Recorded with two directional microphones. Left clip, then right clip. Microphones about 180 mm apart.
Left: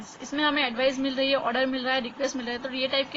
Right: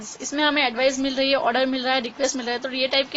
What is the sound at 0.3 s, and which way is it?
A woman's voice, 55° right (ahead or behind).